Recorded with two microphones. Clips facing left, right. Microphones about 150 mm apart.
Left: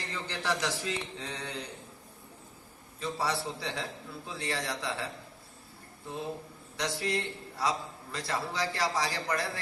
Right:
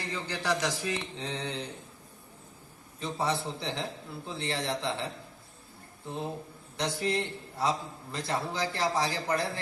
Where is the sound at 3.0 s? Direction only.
25° right (ahead or behind).